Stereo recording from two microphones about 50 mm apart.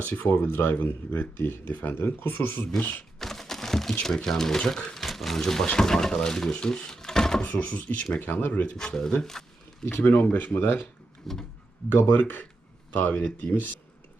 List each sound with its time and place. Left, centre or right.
0.0 s speech: left
3.2 s a sound: centre
4.0 s speech: centre
4.9 s a sound: centre
5.6 s speech: centre
7.4 s speech: left
8.7 s speech: centre
9.9 s speech: left
11.3 s a sound: centre
11.9 s speech: left